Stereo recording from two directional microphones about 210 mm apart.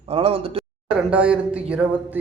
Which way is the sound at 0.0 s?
25° right (ahead or behind).